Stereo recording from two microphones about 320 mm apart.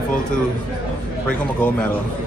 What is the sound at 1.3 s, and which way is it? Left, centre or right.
Speech, centre.